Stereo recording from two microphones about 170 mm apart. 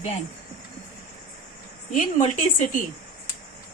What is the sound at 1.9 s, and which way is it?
Speech, 45° left (ahead or behind).